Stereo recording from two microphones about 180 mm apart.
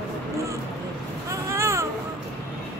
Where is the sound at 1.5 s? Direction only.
15° right (ahead or behind).